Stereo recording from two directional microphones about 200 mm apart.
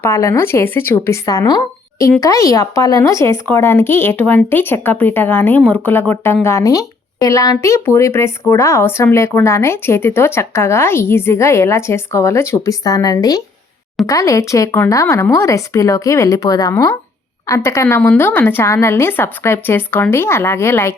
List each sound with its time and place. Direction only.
0.0 s a woman's voice: 15° left (ahead or behind)